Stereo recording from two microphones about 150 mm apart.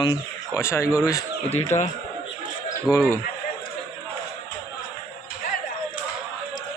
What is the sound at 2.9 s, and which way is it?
Speech, 5° left (ahead or behind).